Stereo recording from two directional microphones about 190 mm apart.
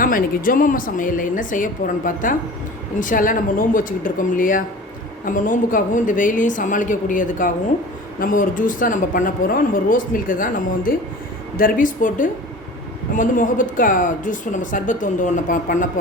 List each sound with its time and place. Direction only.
0.0 s speech: 45° left (ahead or behind)